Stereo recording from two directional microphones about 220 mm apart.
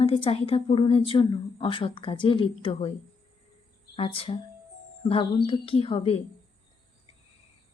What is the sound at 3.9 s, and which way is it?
A woman's voice, 25° left (ahead or behind).